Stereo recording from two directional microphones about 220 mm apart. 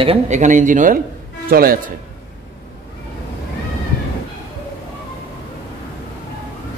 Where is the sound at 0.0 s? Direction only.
30° right (ahead or behind).